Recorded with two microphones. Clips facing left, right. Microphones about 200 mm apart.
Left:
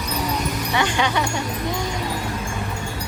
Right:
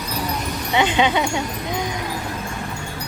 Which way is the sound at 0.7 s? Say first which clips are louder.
Right 4 dB; 20° right (ahead or behind).